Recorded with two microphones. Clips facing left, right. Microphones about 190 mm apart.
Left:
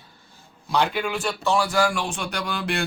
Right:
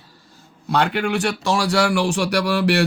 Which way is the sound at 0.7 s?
65° right (ahead or behind).